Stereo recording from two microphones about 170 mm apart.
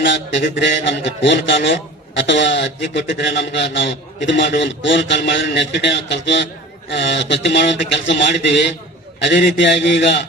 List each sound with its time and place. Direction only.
0.0 s a man's voice: 90° left